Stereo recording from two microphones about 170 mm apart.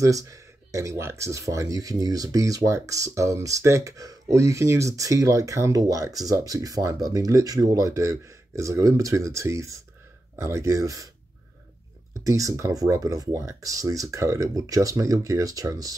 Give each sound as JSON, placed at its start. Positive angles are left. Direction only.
{"t": 0.0, "sound": "speech", "side_deg": -20}
{"t": 12.2, "sound": "speech", "side_deg": -20}